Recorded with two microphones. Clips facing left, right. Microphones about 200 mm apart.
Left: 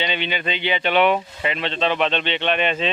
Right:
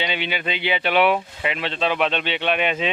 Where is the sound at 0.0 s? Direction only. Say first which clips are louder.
Left 1 dB; 10° right (ahead or behind).